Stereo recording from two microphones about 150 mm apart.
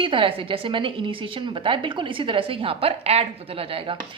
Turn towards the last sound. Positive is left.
turn(degrees=-35)  # may be behind; listen again after turning